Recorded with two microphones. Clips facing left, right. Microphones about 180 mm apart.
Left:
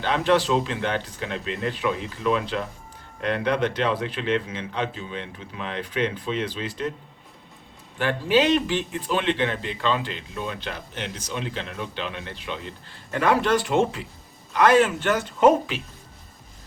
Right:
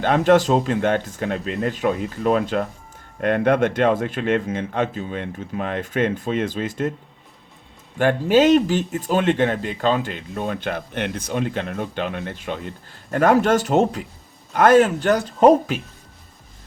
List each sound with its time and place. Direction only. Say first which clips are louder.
0.0 s a man's voice: right 5 dB; 50° right (ahead or behind)
7.9 s a man's voice: right 5 dB; 45° right (ahead or behind)